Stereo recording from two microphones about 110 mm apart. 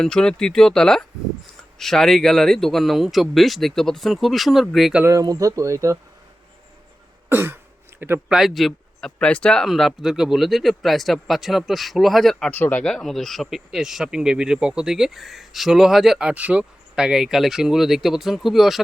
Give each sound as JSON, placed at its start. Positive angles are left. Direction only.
{"t": 0.0, "sound": "speech", "side_deg": 5}
{"t": 5.0, "sound": "speech", "side_deg": -30}
{"t": 7.3, "sound": "throat clearing", "side_deg": -20}
{"t": 8.3, "sound": "speech", "side_deg": -5}
{"t": 12.5, "sound": "speech", "side_deg": 15}